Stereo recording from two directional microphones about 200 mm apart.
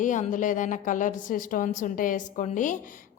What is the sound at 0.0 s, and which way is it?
A woman's voice, 40° left (ahead or behind).